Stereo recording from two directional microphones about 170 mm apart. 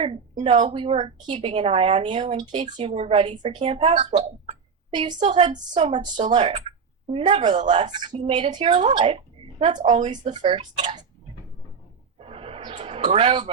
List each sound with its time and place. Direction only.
0.0 s a woman's voice: 35° right (ahead or behind)
8.7 s a woman's voice: 40° right (ahead or behind)
9.6 s a woman's voice: 30° right (ahead or behind)
12.2 s a sound: 35° right (ahead or behind)